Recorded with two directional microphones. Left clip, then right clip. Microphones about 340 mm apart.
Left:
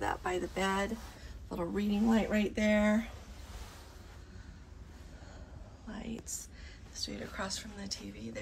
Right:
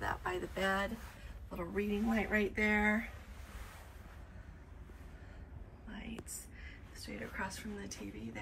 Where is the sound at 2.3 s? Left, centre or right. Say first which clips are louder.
Left 1 dB; left.